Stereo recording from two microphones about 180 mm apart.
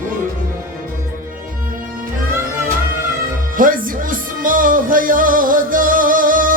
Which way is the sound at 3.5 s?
50° right (ahead or behind).